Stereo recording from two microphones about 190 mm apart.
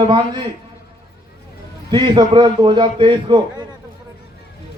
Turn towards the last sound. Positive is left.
turn(degrees=-25)  # may be behind; listen again after turning